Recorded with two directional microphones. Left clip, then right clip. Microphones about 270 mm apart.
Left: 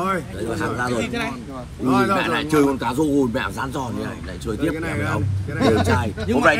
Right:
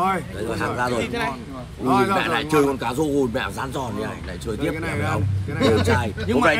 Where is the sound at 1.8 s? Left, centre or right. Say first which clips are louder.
Even; right.